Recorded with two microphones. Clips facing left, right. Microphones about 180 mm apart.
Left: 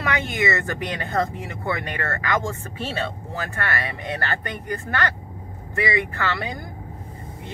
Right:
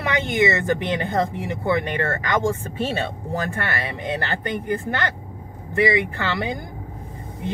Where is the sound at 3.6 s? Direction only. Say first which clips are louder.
Right 1 dB; 20° right (ahead or behind).